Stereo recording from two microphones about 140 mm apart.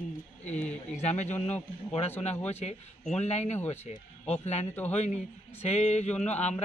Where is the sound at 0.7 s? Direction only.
55° left (ahead or behind).